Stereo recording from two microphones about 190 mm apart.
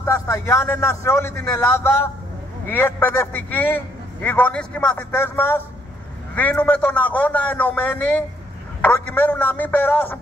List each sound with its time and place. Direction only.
0.0 s a man's voice: 15° left (ahead or behind)